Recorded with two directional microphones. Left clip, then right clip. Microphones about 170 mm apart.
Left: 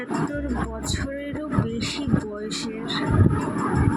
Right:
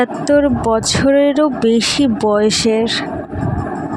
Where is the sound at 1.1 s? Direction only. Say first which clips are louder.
Right 18 dB; 70° right (ahead or behind).